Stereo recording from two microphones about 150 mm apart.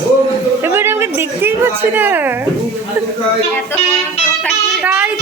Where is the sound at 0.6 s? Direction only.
15° right (ahead or behind).